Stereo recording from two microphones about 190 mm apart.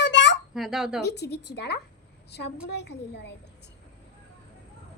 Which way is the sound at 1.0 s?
60° left (ahead or behind).